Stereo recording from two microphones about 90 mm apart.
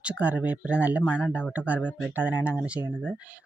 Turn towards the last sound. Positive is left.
turn(degrees=-15)  # may be behind; listen again after turning